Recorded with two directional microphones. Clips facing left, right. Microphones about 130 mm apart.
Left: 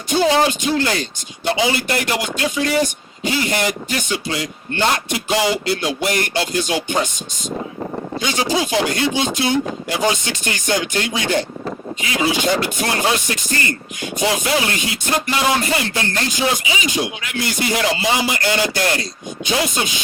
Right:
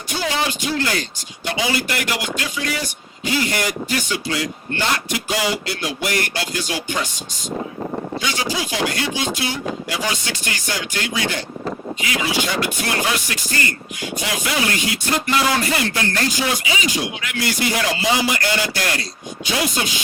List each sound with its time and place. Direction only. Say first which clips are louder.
0.1 s speech: left 8 dB; 25° left (ahead or behind)
8.2 s speech: left 8 dB; 25° left (ahead or behind)